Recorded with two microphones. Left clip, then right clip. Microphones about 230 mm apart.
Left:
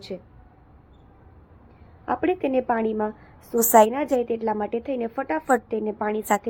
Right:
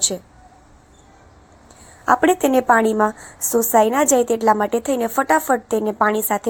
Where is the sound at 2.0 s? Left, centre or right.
Right.